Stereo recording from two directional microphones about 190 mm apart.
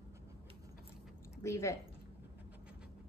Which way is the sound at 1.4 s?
15° left (ahead or behind).